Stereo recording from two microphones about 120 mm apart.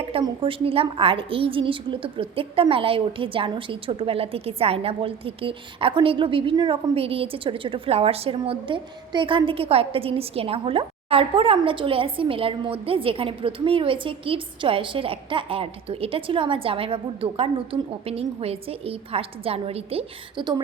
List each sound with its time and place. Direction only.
0.0 s a woman's voice: 50° right (ahead or behind)